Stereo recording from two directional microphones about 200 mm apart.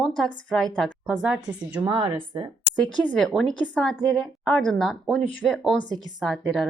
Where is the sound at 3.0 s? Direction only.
5° left (ahead or behind).